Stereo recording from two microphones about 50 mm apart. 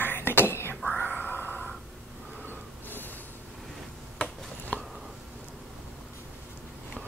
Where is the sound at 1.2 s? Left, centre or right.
Left.